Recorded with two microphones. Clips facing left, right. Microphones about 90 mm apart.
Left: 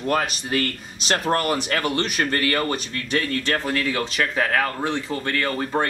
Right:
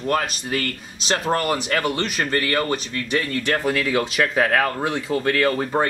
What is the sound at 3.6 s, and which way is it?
Speech, 15° right (ahead or behind).